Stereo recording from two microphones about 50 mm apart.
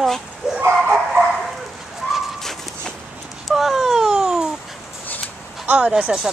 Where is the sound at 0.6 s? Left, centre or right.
Right.